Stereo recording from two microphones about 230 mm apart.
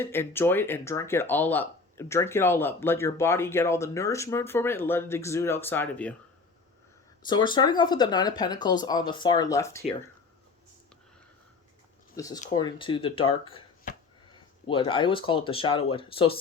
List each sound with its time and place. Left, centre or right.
0.0 s speech: centre
7.3 s speech: centre
12.1 s speech: centre
14.7 s speech: left